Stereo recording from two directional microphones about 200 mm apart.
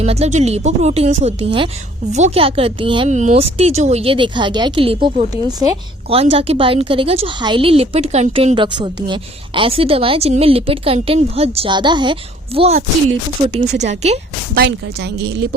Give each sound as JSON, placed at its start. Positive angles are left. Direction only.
{"t": 0.0, "sound": "speech", "side_deg": -30}
{"t": 14.5, "sound": "speech", "side_deg": -55}